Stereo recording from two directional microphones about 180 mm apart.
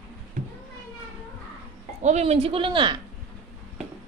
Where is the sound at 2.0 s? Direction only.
35° right (ahead or behind).